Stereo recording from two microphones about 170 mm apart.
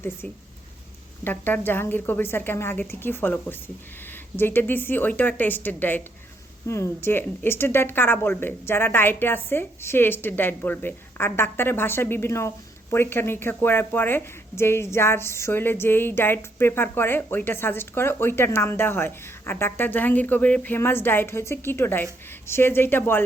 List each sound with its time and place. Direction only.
1.2 s speech: 10° left (ahead or behind)